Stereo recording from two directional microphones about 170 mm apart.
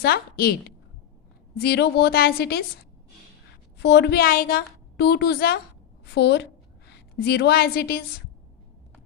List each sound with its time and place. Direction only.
0.0 s a woman's voice: 65° left (ahead or behind)
1.5 s a woman's voice: 75° left (ahead or behind)
3.8 s a woman's voice: 75° left (ahead or behind)
6.1 s a woman's voice: 90° left
7.2 s a woman's voice: 75° left (ahead or behind)